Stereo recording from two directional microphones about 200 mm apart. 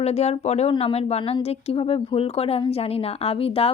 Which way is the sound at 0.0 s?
30° left (ahead or behind).